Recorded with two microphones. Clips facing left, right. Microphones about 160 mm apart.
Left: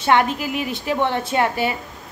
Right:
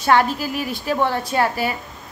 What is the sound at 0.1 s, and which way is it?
A woman's voice, 20° left (ahead or behind).